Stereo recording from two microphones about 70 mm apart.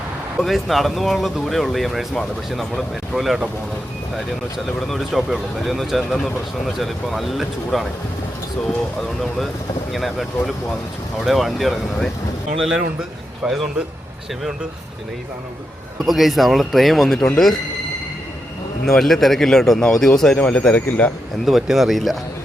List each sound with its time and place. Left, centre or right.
0.3 s speech: centre
4.5 s a man's voice: centre
13.5 s a man's voice: centre
16.0 s speech: centre
18.9 s a man's voice: centre; by 21.1 s left
21.4 s speech: centre